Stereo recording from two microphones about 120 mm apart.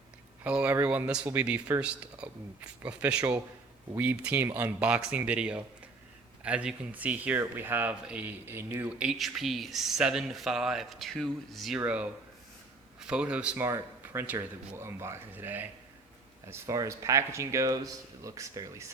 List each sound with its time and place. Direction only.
0.4 s speech: 10° right (ahead or behind)
8.9 s speech: 5° right (ahead or behind)
11.8 s speech: 10° right (ahead or behind)
13.7 s speech: 20° right (ahead or behind)
16.5 s speech: 25° right (ahead or behind)